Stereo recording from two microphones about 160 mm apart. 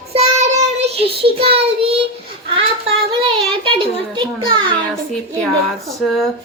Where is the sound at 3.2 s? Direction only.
30° right (ahead or behind).